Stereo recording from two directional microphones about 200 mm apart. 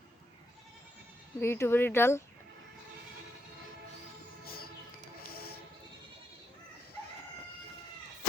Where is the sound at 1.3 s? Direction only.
10° left (ahead or behind).